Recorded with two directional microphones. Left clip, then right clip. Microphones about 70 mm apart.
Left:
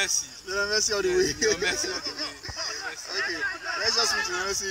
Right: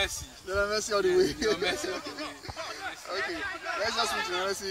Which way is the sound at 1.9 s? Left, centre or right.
Centre.